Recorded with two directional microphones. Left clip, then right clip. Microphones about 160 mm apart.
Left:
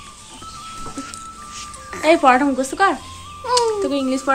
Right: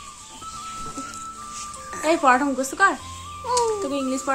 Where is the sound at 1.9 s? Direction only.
5° right (ahead or behind).